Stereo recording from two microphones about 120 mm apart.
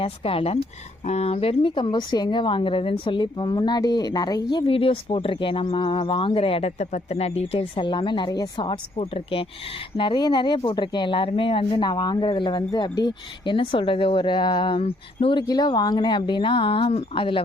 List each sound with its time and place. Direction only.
0.0 s speech: 50° left (ahead or behind)
10.0 s speech: 40° left (ahead or behind)
14.8 s speech: 50° left (ahead or behind)